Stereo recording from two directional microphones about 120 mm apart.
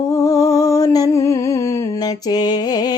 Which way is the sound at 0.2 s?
30° left (ahead or behind).